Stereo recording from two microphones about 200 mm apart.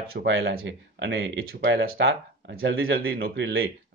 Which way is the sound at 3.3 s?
70° right (ahead or behind).